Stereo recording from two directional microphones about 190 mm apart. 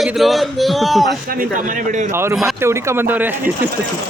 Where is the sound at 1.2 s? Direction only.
50° right (ahead or behind).